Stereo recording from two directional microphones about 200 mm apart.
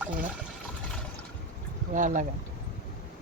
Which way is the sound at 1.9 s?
40° right (ahead or behind).